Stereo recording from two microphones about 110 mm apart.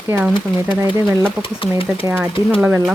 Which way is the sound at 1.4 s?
50° left (ahead or behind).